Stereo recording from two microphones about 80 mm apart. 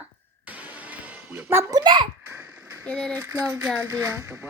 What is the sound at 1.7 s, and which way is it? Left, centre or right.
Speech, right.